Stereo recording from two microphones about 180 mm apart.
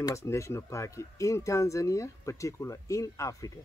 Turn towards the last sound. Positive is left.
turn(degrees=20)  # may be behind; listen again after turning